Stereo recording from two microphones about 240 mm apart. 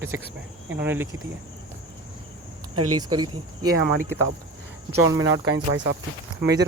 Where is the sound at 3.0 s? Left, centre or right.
Centre.